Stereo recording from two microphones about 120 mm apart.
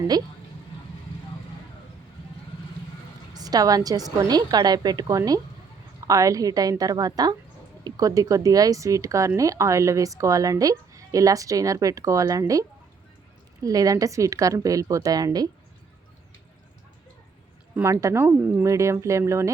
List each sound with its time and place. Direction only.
3.3 s a woman's voice: 30° right (ahead or behind)
17.8 s speech: 25° right (ahead or behind)